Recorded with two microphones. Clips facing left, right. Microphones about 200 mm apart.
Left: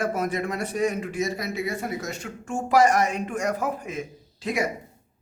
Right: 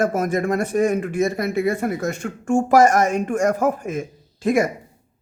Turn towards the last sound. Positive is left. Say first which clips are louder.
# right 8 dB
turn(degrees=-50)  # may be behind; listen again after turning